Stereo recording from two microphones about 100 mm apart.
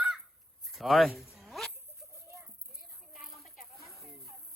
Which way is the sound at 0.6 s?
Centre (ahead or behind).